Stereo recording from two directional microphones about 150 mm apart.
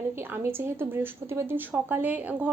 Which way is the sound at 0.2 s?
15° right (ahead or behind).